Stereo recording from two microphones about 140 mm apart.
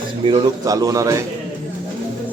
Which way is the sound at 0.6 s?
25° right (ahead or behind).